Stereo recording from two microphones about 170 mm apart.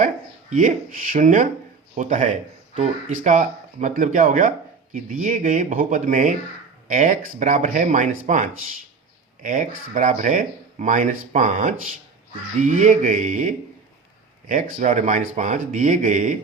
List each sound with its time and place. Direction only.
0.5 s speech: 50° right (ahead or behind)